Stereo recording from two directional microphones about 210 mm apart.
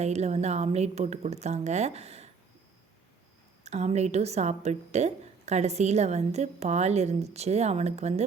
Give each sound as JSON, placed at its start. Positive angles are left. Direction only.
{"t": 0.0, "sound": "a woman's voice", "side_deg": -30}
{"t": 3.6, "sound": "a woman's voice", "side_deg": -30}